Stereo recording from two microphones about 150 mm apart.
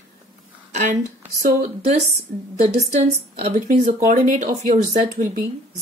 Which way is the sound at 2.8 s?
45° right (ahead or behind).